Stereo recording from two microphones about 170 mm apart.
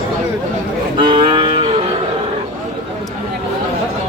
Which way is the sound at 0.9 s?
30° right (ahead or behind).